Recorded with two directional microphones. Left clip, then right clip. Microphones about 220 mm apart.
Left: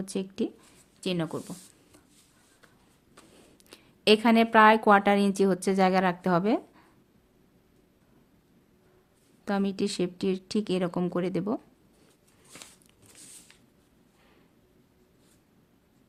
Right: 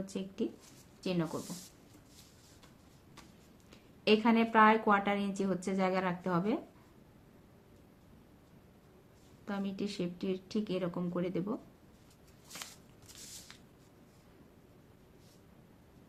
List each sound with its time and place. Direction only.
0.0 s a woman's voice: 45° left (ahead or behind)
3.7 s a woman's voice: 40° left (ahead or behind)
9.4 s a woman's voice: 45° left (ahead or behind)